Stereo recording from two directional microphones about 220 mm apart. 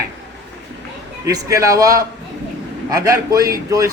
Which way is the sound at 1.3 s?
15° right (ahead or behind).